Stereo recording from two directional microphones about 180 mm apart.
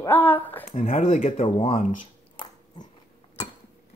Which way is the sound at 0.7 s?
40° left (ahead or behind).